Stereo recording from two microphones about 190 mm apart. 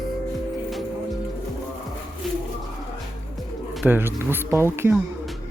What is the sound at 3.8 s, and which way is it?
Speech, 10° right (ahead or behind).